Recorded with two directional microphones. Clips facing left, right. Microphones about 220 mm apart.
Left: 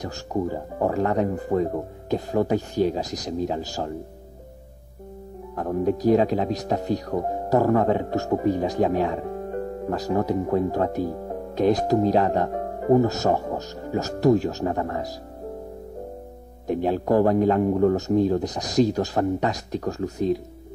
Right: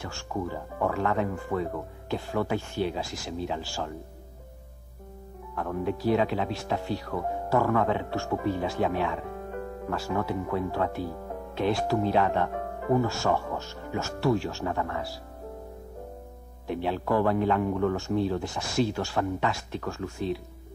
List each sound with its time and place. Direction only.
0.0 s speech: 40° left (ahead or behind)
5.6 s speech: 40° left (ahead or behind)
16.6 s speech: 45° left (ahead or behind)